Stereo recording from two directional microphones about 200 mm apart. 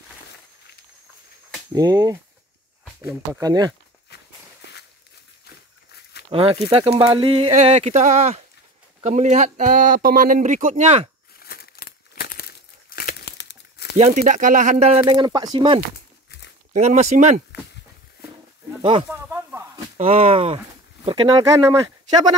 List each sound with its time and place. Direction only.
1.7 s speech: 20° right (ahead or behind)
6.3 s speech: 25° right (ahead or behind)
11.3 s crumpling: 50° left (ahead or behind)
13.9 s speech: 35° right (ahead or behind)
16.7 s speech: 35° right (ahead or behind)
18.8 s speech: 25° right (ahead or behind)
19.0 s snake: 10° right (ahead or behind)
20.0 s speech: 30° right (ahead or behind)